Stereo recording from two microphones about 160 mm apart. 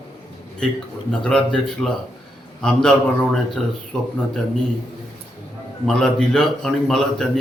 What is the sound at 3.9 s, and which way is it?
Speech, 5° left (ahead or behind).